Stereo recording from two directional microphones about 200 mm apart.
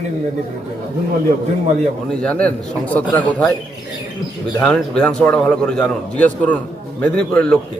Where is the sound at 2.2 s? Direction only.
5° left (ahead or behind).